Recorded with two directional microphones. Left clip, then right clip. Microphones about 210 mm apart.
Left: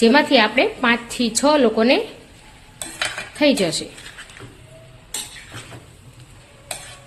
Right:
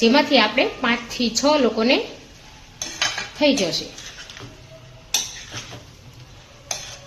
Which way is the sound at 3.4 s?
25° left (ahead or behind).